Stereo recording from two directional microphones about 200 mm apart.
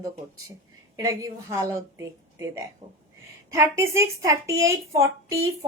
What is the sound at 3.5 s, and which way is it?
A woman's voice, 15° right (ahead or behind).